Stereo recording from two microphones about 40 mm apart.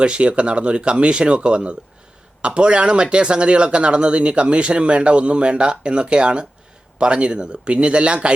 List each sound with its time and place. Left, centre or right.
0.0 s speech: right